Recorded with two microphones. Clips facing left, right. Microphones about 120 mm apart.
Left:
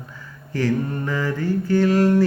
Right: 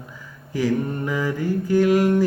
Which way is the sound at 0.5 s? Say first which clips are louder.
Even; 10° right (ahead or behind).